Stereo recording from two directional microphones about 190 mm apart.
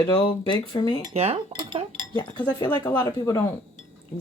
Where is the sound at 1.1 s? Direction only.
35° right (ahead or behind).